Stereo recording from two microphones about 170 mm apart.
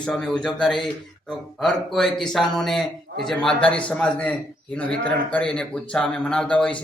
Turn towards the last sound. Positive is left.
turn(degrees=5)  # may be behind; listen again after turning